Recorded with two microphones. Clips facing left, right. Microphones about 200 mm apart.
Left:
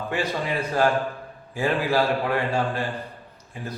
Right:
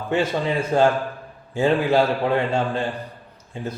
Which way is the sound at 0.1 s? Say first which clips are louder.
Right 6 dB; 25° right (ahead or behind).